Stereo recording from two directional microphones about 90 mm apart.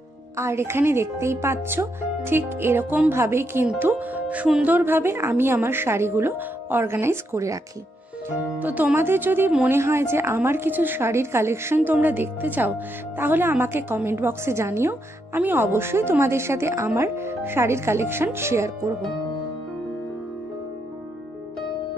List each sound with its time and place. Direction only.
0.4 s a woman's voice: 30° right (ahead or behind)
8.4 s a woman's voice: 20° right (ahead or behind)